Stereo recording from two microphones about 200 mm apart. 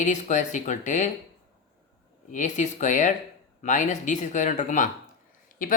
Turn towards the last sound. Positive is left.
turn(degrees=45)  # may be behind; listen again after turning